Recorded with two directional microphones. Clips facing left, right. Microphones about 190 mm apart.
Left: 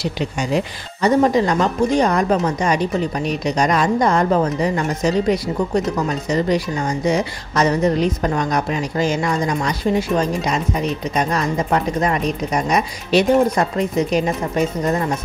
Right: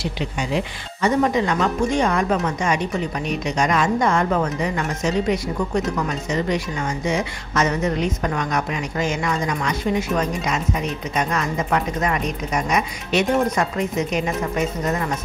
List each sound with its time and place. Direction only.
0.0 s speech: 40° left (ahead or behind)
5.9 s speech: 35° left (ahead or behind)